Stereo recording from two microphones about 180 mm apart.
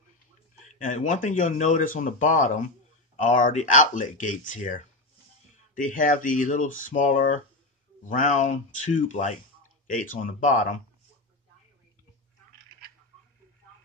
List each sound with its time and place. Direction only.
0.8 s speech: 45° left (ahead or behind)